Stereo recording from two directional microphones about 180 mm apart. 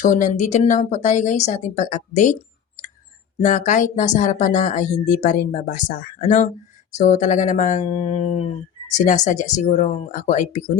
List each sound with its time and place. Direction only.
0.0 s a woman's voice: 45° left (ahead or behind)